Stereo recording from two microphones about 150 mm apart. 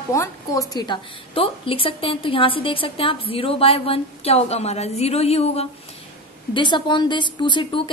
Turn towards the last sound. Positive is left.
turn(degrees=30)  # may be behind; listen again after turning